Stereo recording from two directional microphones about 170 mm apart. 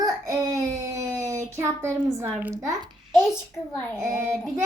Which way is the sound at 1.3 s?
15° right (ahead or behind).